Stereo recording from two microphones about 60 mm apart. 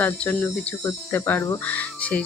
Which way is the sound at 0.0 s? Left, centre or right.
Left.